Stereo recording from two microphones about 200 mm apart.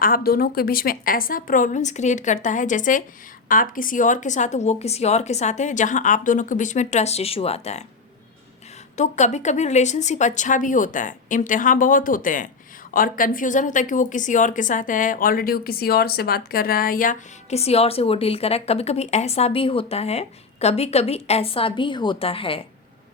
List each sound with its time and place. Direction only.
0.0 s a woman's voice: 45° left (ahead or behind)
9.0 s a woman's voice: 35° left (ahead or behind)